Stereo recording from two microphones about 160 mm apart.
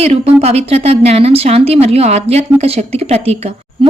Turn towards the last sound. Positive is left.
turn(degrees=-40)  # may be behind; listen again after turning